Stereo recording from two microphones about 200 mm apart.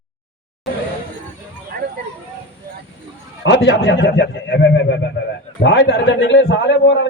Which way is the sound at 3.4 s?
65° left (ahead or behind).